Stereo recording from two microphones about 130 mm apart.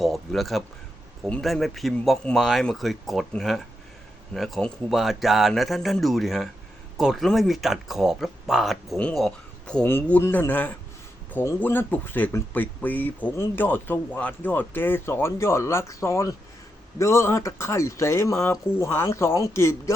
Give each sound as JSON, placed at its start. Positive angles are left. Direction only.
{"t": 0.0, "sound": "speech", "side_deg": 0}
{"t": 9.8, "sound": "speech", "side_deg": 15}